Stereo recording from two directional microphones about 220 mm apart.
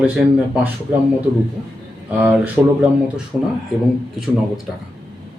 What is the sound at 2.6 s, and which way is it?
Speech, centre (ahead or behind).